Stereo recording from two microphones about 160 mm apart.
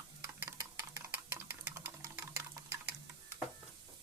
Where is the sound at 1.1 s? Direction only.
10° right (ahead or behind).